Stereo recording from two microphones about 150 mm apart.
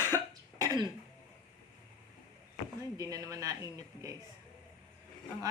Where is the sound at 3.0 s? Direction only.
25° right (ahead or behind).